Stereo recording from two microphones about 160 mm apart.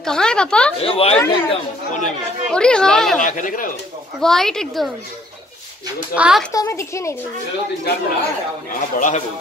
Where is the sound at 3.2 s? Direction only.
55° left (ahead or behind).